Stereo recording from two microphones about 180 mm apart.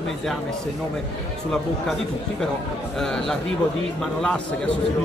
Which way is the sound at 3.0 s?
Centre (ahead or behind).